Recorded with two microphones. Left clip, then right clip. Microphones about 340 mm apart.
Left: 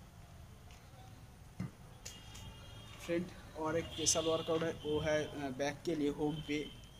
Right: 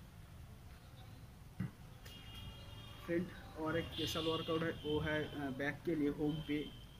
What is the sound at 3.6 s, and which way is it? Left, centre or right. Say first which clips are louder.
Speech: left 4 dB; centre.